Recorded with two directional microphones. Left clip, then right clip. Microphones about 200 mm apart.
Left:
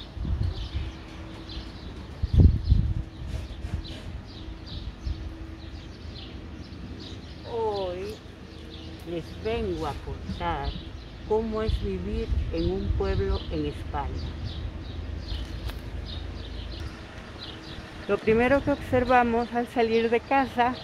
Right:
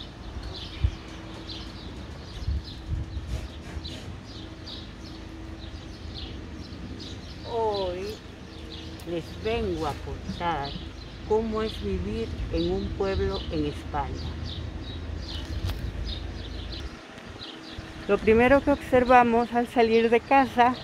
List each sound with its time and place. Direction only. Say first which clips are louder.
7.7 s a sound: right 1 dB; centre (ahead or behind)
9.1 s speech: right 1 dB; 5° right (ahead or behind)
18.0 s speech: right 2 dB; 15° right (ahead or behind)